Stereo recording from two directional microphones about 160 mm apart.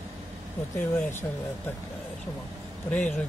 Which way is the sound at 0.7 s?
15° left (ahead or behind).